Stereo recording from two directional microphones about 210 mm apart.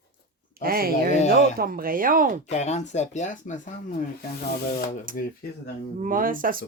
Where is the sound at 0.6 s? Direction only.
45° right (ahead or behind).